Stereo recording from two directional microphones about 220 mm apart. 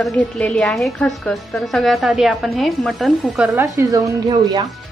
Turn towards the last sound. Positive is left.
turn(degrees=-20)  # may be behind; listen again after turning